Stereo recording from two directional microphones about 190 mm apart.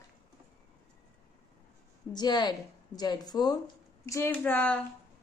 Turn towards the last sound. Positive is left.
turn(degrees=10)  # may be behind; listen again after turning